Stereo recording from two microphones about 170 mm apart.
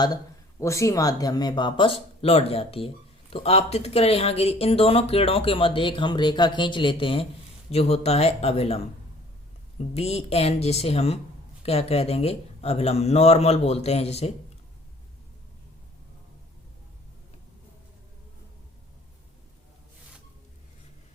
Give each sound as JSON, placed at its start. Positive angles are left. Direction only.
{"t": 0.6, "sound": "speech", "side_deg": 15}
{"t": 9.9, "sound": "speech", "side_deg": 35}